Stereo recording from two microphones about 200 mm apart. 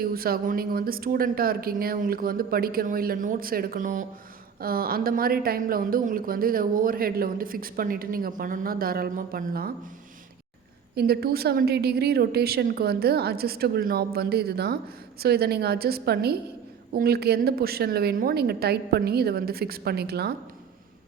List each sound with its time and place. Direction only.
0.0 s speech: 45° right (ahead or behind)
10.9 s speech: 50° right (ahead or behind)